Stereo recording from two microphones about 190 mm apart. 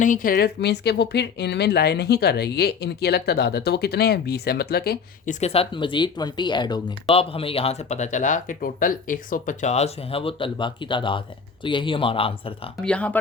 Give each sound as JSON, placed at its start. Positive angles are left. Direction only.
{"t": 0.0, "sound": "speech", "side_deg": 45}
{"t": 12.8, "sound": "speech", "side_deg": 5}